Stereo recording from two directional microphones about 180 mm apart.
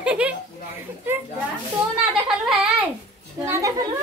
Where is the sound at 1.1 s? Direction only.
10° right (ahead or behind).